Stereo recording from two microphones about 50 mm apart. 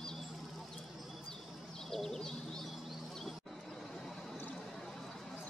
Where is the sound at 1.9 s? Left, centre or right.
Centre.